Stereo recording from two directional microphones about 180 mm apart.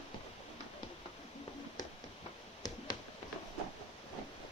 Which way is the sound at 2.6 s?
20° left (ahead or behind).